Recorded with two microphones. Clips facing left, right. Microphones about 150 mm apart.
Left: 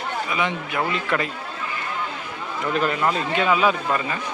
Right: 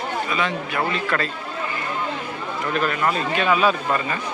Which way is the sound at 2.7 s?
20° left (ahead or behind).